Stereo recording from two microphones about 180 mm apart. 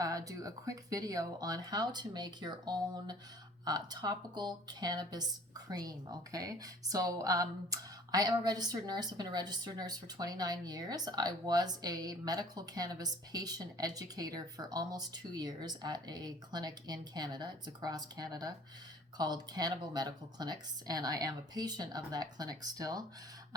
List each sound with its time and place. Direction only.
0.0 s speech: 20° right (ahead or behind)